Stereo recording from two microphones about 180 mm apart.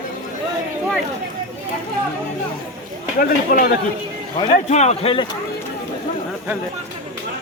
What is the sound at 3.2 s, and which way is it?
Speech, 55° left (ahead or behind).